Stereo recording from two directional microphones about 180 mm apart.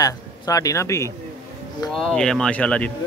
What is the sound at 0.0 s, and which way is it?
Speech, 20° left (ahead or behind).